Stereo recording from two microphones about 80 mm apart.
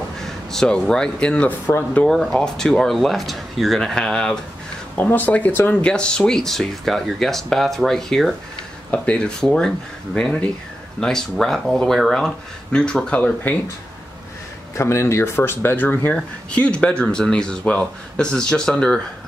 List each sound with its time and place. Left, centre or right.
0.2 s speech: centre
4.9 s speech: left; by 8.4 s centre
8.9 s speech: centre
14.8 s speech: left; by 18.9 s centre